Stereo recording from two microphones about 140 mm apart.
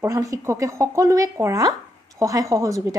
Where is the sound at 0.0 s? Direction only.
25° right (ahead or behind).